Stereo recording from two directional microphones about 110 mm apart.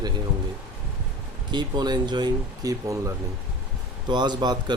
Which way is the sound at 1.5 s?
40° right (ahead or behind).